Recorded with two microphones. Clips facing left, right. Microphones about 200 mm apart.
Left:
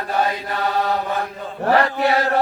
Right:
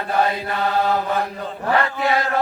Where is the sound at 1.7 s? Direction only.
40° left (ahead or behind).